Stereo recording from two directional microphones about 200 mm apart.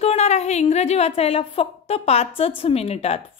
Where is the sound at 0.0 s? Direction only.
30° left (ahead or behind).